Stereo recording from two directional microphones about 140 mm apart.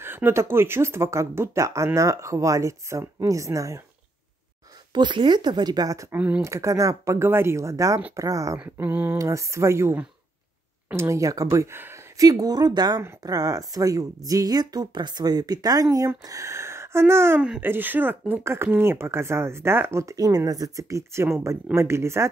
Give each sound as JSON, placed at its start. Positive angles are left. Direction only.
{"t": 0.0, "sound": "speech", "side_deg": -15}
{"t": 4.9, "sound": "a woman's voice", "side_deg": -35}
{"t": 6.1, "sound": "speech", "side_deg": -10}
{"t": 6.4, "sound": "speech", "side_deg": -20}